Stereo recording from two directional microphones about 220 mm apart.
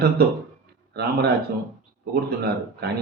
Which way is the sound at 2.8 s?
45° right (ahead or behind).